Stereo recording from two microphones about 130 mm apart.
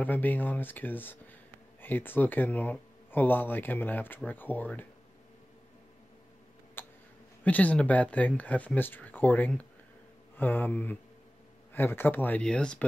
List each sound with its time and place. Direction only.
0.0 s speech: 15° left (ahead or behind)
6.8 s a sound: 15° left (ahead or behind)
7.4 s speech: 10° left (ahead or behind)